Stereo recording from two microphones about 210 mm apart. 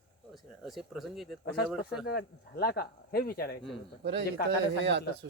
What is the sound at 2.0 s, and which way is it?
Speech, 50° left (ahead or behind).